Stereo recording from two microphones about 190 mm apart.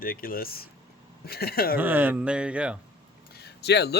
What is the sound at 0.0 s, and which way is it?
Speech, 50° left (ahead or behind).